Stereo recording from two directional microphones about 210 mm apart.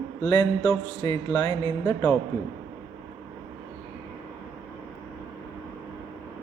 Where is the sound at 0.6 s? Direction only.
15° left (ahead or behind).